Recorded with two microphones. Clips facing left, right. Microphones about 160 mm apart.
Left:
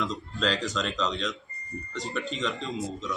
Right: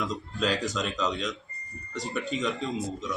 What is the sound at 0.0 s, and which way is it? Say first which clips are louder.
A man's voice: even; 10° right (ahead or behind).